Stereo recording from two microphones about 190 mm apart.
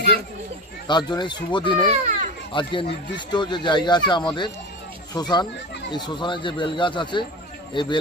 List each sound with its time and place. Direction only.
0.9 s speech: 25° left (ahead or behind)
1.9 s children playing: 35° right (ahead or behind)
2.5 s speech: 25° left (ahead or behind)